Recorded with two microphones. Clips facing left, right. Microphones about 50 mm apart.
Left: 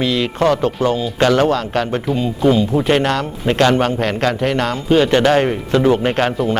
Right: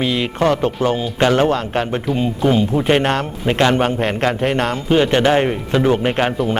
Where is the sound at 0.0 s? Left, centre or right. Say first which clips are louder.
Left 1 dB; right.